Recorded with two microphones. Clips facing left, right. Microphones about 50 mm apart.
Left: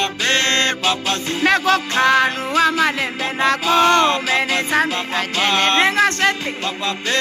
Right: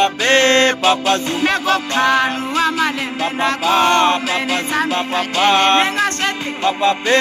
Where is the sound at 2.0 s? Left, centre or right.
Left.